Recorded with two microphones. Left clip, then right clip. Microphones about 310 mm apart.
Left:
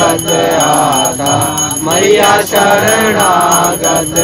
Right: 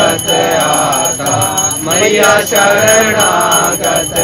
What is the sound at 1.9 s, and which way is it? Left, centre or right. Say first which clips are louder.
Bell: left 1 dB; left.